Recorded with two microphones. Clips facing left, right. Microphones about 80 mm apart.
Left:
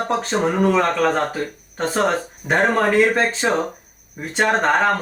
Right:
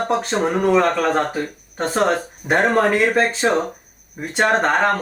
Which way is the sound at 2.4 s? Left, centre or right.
Centre.